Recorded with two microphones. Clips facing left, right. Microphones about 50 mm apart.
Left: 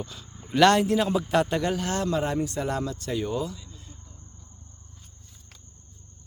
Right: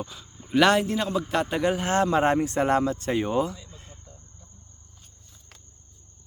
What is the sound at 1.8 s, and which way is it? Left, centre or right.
Speech, right.